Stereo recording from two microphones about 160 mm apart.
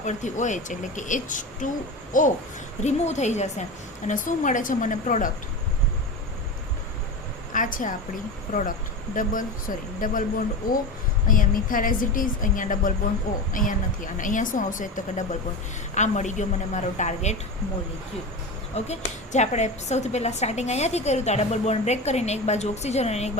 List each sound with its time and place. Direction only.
0.0 s speech: 50° left (ahead or behind)
7.5 s speech: 55° left (ahead or behind)
9.1 s speech: 55° left (ahead or behind)
11.3 s speech: 60° left (ahead or behind)
18.7 s speech: 45° left (ahead or behind)